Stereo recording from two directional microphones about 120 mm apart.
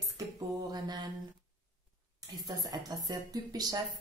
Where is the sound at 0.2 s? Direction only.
30° right (ahead or behind).